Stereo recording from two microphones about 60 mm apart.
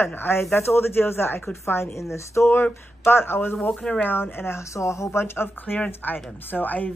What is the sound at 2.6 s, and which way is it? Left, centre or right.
Speech, left.